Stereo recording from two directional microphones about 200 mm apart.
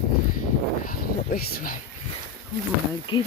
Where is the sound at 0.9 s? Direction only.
45° left (ahead or behind).